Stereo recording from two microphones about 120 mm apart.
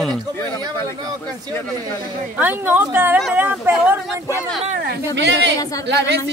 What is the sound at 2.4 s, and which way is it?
A woman's voice, 15° right (ahead or behind).